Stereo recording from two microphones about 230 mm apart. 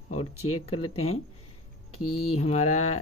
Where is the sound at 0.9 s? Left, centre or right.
Left.